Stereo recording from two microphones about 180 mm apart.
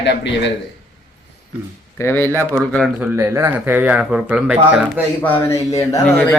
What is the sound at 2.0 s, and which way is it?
Speech, 10° left (ahead or behind).